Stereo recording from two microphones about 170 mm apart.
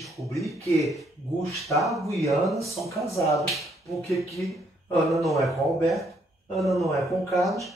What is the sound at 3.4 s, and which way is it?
Speech, centre (ahead or behind).